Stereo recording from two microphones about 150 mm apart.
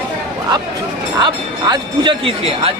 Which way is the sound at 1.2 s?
30° right (ahead or behind).